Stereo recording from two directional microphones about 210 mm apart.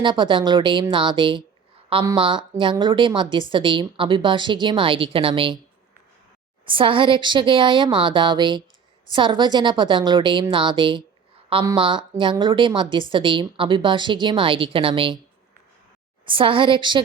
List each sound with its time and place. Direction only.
0.0 s a woman's voice: 20° right (ahead or behind)
6.7 s a woman's voice: 25° right (ahead or behind)
16.2 s a woman's voice: 25° right (ahead or behind)